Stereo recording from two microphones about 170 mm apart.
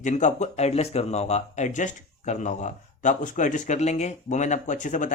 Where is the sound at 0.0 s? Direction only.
45° left (ahead or behind).